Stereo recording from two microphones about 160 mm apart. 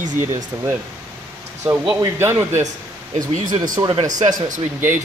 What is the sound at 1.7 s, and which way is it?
Speech, 5° right (ahead or behind).